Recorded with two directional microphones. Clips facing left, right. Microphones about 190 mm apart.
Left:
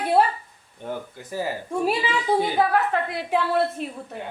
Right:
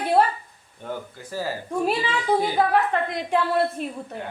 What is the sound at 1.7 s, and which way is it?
A woman's voice, 5° left (ahead or behind).